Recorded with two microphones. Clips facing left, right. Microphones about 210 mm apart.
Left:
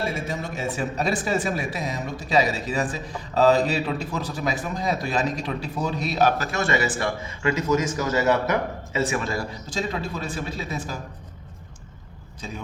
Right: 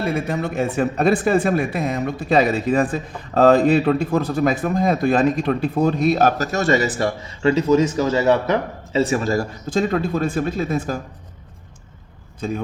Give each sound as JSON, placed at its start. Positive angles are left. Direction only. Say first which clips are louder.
{"t": 0.0, "sound": "speech", "louder": "right 6 dB", "side_deg": -60}
{"t": 12.4, "sound": "speech", "louder": "right 11 dB", "side_deg": -50}